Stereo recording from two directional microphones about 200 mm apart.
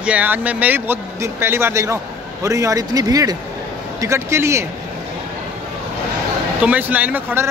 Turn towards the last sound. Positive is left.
turn(degrees=-10)  # may be behind; listen again after turning